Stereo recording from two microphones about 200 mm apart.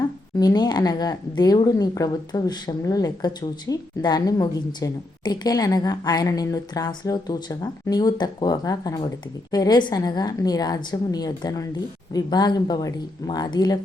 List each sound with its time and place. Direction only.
0.3 s speech: 20° left (ahead or behind)